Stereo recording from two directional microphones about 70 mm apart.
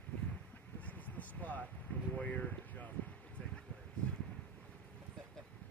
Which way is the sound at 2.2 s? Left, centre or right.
Left.